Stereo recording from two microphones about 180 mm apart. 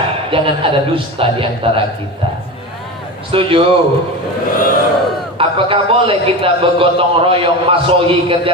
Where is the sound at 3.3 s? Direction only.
30° right (ahead or behind).